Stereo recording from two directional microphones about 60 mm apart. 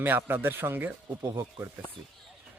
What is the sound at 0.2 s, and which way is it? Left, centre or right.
Speech, right.